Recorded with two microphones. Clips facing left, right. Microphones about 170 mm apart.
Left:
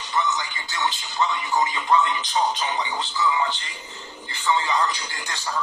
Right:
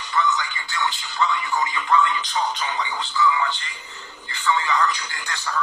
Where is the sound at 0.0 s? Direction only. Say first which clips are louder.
Right 2 dB; 20° left (ahead or behind).